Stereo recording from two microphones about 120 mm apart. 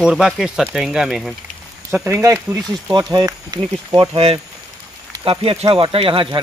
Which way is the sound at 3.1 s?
35° right (ahead or behind).